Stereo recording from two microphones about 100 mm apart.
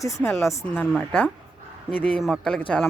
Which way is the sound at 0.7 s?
15° left (ahead or behind).